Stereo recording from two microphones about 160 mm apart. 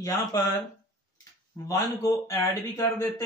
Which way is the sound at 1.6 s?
20° left (ahead or behind).